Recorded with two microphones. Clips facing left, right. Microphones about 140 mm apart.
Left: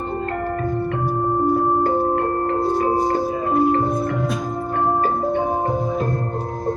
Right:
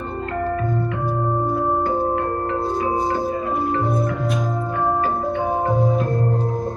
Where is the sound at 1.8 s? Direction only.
45° left (ahead or behind).